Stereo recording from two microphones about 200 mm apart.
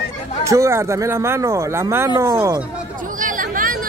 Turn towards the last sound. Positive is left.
turn(degrees=-40)  # may be behind; listen again after turning